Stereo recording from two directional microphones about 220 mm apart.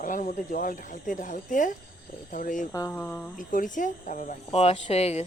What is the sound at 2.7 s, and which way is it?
Speech, 10° left (ahead or behind).